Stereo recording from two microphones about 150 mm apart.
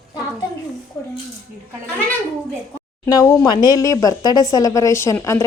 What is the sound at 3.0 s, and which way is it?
Speech, 20° left (ahead or behind).